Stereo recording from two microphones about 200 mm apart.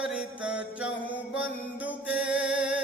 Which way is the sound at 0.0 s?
5° right (ahead or behind).